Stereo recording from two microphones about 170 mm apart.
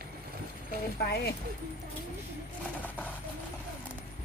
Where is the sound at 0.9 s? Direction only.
65° left (ahead or behind).